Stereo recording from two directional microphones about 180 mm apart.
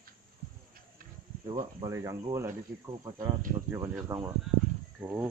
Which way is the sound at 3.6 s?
15° right (ahead or behind).